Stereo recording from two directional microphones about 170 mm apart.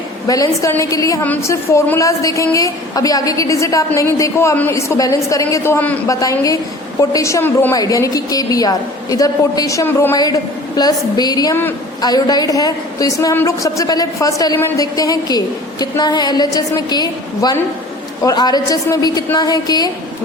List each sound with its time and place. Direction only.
0.3 s a woman's voice: 20° left (ahead or behind)